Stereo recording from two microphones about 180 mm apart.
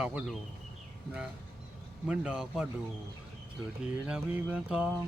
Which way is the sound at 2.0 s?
5° right (ahead or behind).